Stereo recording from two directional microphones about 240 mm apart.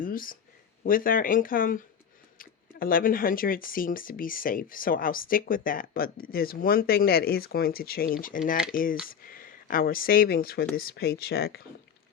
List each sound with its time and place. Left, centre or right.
0.0 s speech: left